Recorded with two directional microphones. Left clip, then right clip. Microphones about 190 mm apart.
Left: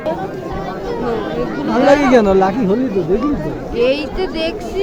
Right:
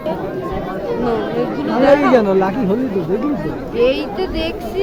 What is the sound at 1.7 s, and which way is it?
Speech, 40° left (ahead or behind).